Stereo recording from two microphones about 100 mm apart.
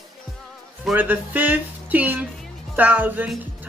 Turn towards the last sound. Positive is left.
turn(degrees=-15)  # may be behind; listen again after turning